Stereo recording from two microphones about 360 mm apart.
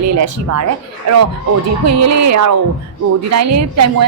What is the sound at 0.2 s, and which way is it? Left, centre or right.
Speech, right.